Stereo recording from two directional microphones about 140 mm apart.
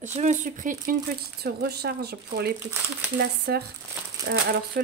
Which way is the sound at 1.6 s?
90° right.